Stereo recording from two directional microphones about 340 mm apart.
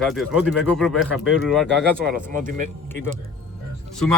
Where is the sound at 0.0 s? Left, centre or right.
Centre.